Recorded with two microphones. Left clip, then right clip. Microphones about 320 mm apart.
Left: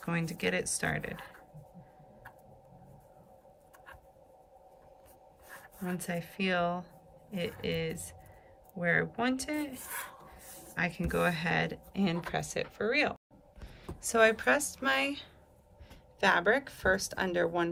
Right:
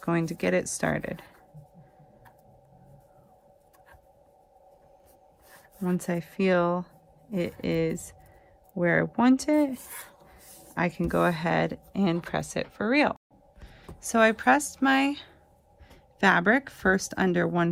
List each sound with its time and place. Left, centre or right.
0.0 s speech: centre
6.0 s speech: centre